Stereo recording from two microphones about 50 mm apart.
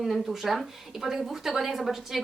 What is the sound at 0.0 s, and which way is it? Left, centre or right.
Speech, centre.